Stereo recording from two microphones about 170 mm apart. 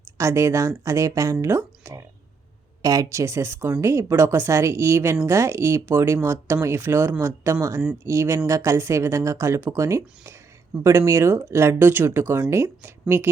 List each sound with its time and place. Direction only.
0.2 s speech: 15° right (ahead or behind)